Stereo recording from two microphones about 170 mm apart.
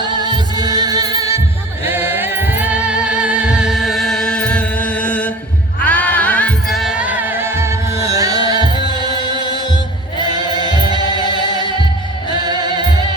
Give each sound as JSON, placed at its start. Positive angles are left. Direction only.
{"t": 0.0, "sound": "music", "side_deg": -25}